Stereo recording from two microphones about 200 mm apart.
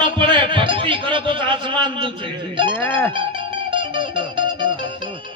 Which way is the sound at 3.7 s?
25° right (ahead or behind).